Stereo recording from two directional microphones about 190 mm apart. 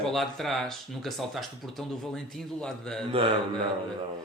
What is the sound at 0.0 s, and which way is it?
Speech, centre (ahead or behind).